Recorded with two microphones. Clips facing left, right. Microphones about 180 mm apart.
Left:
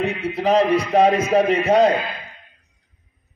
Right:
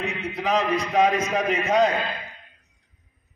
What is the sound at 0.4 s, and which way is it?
A man's voice, 35° left (ahead or behind).